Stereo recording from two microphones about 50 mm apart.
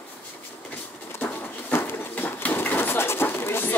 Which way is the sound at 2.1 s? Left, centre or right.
Left.